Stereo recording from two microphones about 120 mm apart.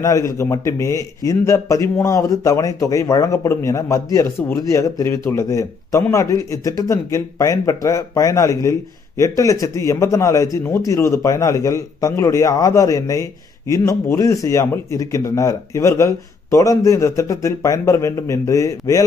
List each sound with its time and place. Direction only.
0.0 s a man's voice: 30° left (ahead or behind)